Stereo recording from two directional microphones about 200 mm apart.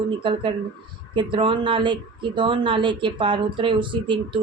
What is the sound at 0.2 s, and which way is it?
Speech, 25° right (ahead or behind).